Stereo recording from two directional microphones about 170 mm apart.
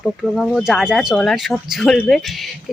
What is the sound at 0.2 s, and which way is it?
Speech, centre (ahead or behind).